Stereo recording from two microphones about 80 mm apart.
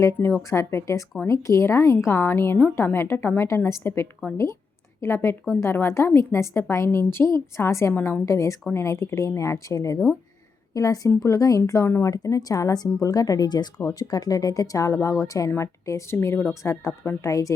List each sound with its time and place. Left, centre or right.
0.0 s a woman's voice: left
7.9 s a woman's voice: left
8.2 s a woman's voice: left
12.1 s a woman's voice: left